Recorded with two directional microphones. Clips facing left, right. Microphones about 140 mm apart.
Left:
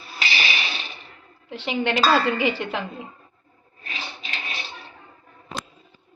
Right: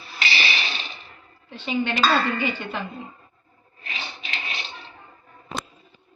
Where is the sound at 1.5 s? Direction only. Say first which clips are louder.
Left 1 dB; 90° left.